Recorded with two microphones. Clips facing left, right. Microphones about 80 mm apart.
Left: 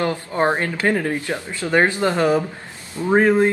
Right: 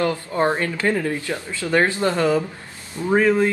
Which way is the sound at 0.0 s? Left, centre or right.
Left.